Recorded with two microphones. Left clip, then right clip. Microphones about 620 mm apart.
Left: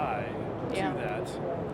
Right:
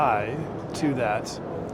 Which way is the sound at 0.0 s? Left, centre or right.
Right.